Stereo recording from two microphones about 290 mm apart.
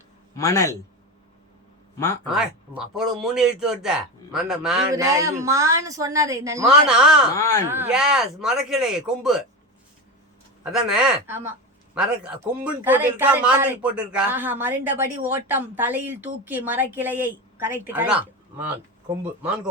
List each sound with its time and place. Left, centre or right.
0.3 s a man's voice: centre
2.2 s a man's voice: centre
10.6 s a man's voice: centre